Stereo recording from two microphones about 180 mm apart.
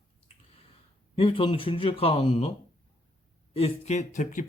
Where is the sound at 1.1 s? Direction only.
30° left (ahead or behind).